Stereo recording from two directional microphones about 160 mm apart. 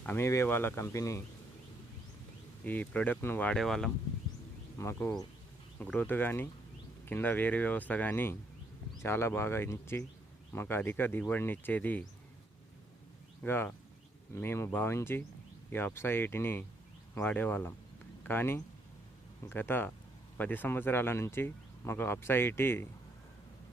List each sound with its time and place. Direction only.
0.0 s speech: 15° left (ahead or behind)
2.6 s speech: 10° left (ahead or behind)
4.8 s speech: 15° left (ahead or behind)
13.4 s speech: 10° left (ahead or behind)